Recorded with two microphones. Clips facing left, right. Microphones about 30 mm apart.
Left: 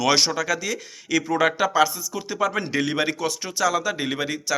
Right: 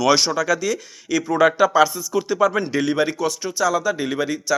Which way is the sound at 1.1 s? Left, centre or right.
Left.